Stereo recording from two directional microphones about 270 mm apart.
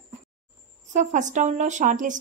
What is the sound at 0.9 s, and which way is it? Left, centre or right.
Speech, right.